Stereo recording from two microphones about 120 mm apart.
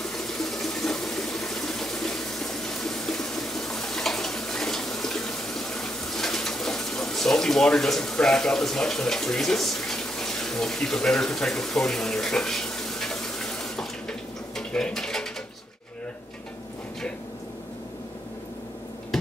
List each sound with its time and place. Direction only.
0.0 s water: 5° left (ahead or behind)